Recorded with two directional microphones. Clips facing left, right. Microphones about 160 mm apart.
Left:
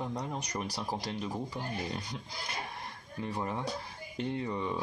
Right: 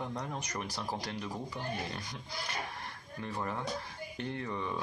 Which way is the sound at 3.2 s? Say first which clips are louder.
Left 2 dB; 15° left (ahead or behind).